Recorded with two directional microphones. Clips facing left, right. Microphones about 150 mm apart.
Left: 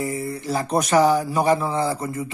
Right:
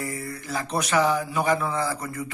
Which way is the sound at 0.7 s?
40° left (ahead or behind).